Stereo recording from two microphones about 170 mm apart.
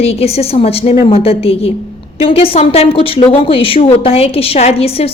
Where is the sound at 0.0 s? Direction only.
35° left (ahead or behind).